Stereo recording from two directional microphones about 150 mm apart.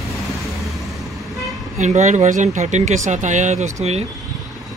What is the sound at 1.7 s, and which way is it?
Speech, 50° right (ahead or behind).